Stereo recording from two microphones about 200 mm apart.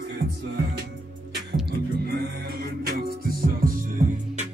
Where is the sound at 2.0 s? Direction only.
50° right (ahead or behind).